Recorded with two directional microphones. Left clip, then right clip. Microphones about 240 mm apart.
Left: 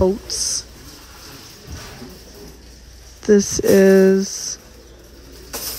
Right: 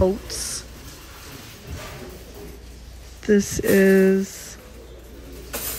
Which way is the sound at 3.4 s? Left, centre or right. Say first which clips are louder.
Left 5 dB; right.